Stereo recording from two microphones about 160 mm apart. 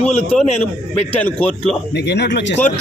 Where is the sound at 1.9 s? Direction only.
90° left.